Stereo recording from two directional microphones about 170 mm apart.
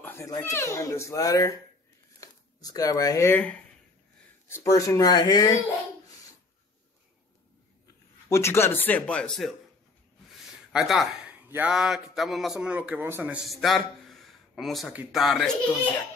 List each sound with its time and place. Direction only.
0.0 s speech: 15° left (ahead or behind)
8.3 s speech: 15° left (ahead or behind)
10.3 s a sound: centre (ahead or behind)
11.4 s a man's voice: 10° right (ahead or behind)
13.5 s a sound: centre (ahead or behind)
14.9 s speech: 5° right (ahead or behind)